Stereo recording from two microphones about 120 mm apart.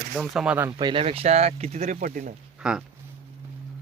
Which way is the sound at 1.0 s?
55° right (ahead or behind).